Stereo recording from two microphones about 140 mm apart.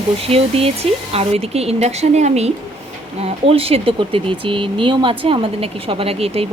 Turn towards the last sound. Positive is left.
turn(degrees=-45)  # may be behind; listen again after turning